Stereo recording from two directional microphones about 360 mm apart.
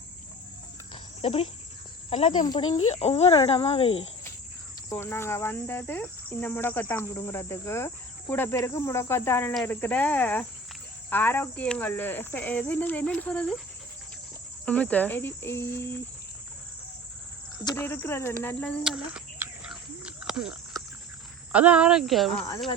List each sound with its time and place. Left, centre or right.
1.2 s speech: centre
2.0 s cricket: centre
8.3 s speech: centre
14.6 s speech: centre
17.6 s speech: centre